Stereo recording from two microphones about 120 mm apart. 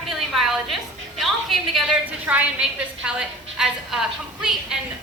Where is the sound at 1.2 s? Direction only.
Centre (ahead or behind).